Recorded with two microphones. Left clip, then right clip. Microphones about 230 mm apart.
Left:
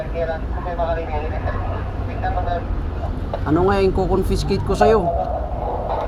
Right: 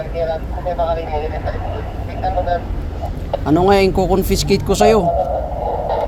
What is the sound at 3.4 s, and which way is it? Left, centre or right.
Speech, right.